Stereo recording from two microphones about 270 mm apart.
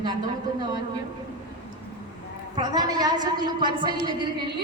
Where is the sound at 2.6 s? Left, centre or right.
Centre.